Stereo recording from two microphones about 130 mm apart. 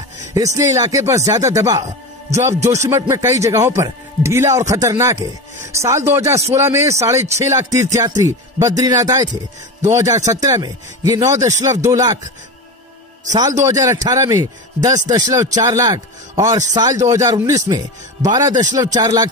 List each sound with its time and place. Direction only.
0.6 s a man's voice: 25° right (ahead or behind)
13.4 s a man's voice: 25° right (ahead or behind)